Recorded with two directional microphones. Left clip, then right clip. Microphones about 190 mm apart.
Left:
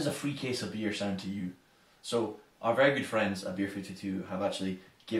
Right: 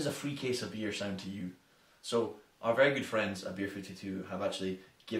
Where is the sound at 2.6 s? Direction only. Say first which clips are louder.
Left 2 dB; 20° right (ahead or behind).